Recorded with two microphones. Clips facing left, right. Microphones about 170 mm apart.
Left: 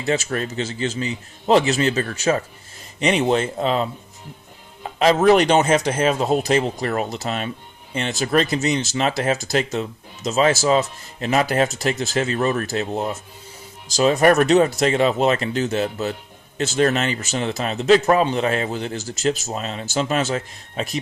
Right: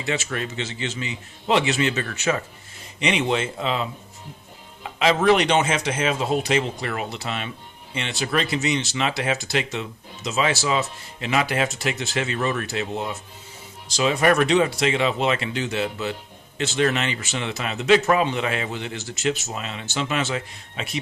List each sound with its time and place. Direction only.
0.0 s speech: 40° left (ahead or behind)